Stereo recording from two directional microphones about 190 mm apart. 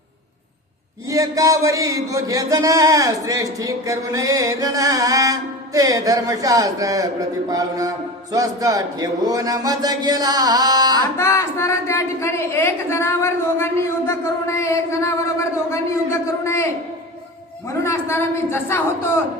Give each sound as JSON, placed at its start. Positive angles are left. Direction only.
{"t": 1.0, "sound": "a sound", "side_deg": -20}
{"t": 11.2, "sound": "a woman's voice", "side_deg": 15}
{"t": 17.8, "sound": "a woman's voice", "side_deg": 15}